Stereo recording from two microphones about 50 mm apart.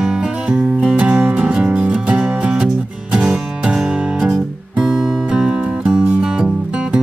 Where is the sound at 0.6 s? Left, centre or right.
Right; by 4.3 s centre.